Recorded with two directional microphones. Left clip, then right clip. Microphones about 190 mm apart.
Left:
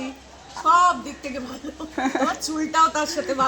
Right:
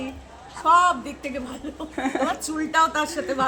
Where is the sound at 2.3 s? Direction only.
25° right (ahead or behind).